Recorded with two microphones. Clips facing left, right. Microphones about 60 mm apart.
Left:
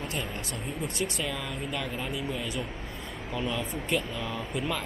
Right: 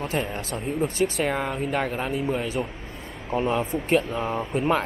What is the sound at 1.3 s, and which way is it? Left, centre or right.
Speech, right.